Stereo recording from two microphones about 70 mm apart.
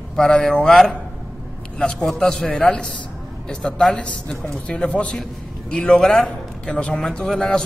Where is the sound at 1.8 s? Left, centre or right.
Centre.